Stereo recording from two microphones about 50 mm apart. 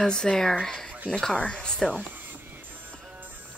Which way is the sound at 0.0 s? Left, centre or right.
Centre.